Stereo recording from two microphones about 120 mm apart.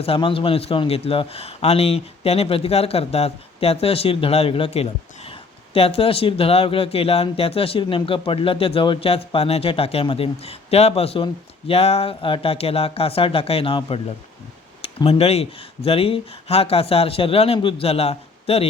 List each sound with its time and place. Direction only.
0.0 s a man's voice: 50° left (ahead or behind)
14.8 s speech: 60° left (ahead or behind)